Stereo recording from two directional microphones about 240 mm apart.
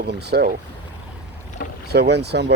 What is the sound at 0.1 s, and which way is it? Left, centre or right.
Speech, right.